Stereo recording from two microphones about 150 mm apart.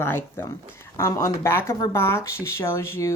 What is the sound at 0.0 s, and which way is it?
Speech, 15° left (ahead or behind).